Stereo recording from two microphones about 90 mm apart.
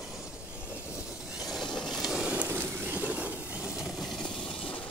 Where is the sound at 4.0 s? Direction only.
5° left (ahead or behind).